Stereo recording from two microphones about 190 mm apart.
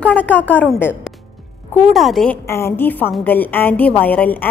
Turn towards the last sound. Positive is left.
turn(degrees=10)  # may be behind; listen again after turning